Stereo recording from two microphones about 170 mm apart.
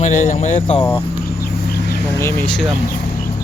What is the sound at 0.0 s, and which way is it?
Speech, 45° left (ahead or behind).